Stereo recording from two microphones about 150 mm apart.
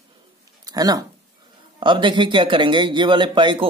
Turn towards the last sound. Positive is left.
turn(degrees=-30)  # may be behind; listen again after turning